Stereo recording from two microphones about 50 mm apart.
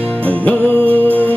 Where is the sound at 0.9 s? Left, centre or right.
Right.